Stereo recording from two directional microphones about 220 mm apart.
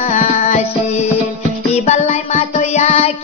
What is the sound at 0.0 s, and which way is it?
Music, 30° left (ahead or behind).